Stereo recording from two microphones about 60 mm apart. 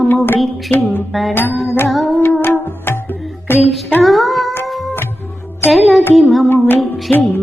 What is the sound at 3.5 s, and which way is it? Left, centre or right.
Child singing, left.